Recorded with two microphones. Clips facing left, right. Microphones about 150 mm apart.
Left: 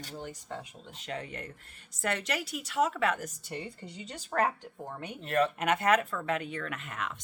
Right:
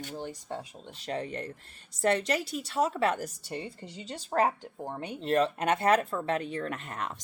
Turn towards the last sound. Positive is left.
turn(degrees=-35)  # may be behind; listen again after turning